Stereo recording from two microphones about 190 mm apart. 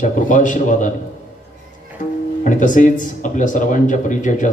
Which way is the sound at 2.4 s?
45° left (ahead or behind).